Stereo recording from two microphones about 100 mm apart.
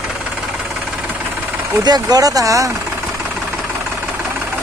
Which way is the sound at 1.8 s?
40° right (ahead or behind).